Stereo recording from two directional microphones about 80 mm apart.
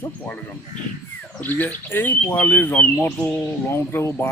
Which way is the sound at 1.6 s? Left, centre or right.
Left.